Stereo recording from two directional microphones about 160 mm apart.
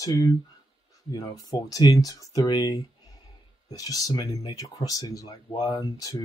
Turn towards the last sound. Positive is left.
turn(degrees=20)  # may be behind; listen again after turning